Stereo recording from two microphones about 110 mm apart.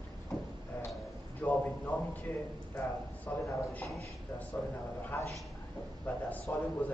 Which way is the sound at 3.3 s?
20° left (ahead or behind).